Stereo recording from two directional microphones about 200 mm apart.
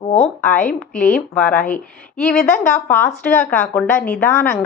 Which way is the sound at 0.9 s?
40° left (ahead or behind).